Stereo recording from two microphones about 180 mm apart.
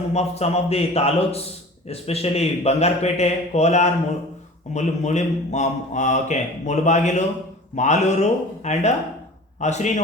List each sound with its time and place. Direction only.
0.1 s a man's voice: 35° left (ahead or behind)